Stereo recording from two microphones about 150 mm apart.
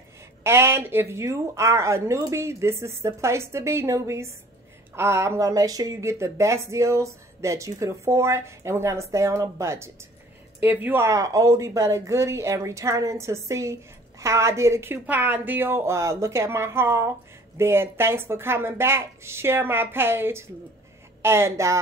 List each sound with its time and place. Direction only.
0.4 s a woman's voice: 15° right (ahead or behind)